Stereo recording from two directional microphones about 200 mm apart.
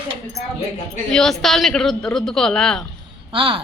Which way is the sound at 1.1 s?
Centre (ahead or behind).